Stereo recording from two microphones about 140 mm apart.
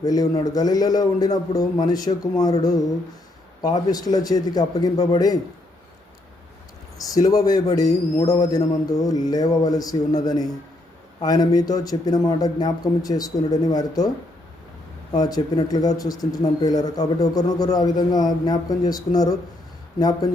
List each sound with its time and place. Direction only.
0.0 s speech: 25° left (ahead or behind)
7.1 s speech: 25° left (ahead or behind)
15.1 s speech: 30° left (ahead or behind)